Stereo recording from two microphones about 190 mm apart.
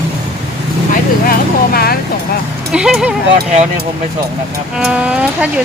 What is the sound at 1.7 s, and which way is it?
Speech, 55° left (ahead or behind).